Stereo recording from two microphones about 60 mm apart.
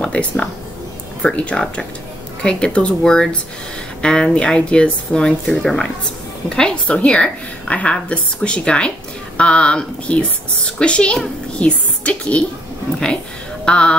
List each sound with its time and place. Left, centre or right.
0.0 s a woman's voice: centre
13.7 s speech: centre